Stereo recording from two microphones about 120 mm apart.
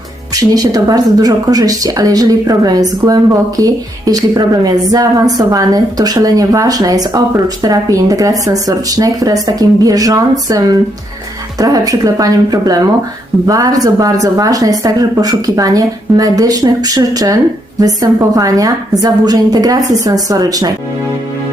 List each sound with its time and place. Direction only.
0.3 s a woman's voice: 30° right (ahead or behind)